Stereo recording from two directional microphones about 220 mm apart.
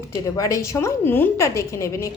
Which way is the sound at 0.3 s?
15° left (ahead or behind).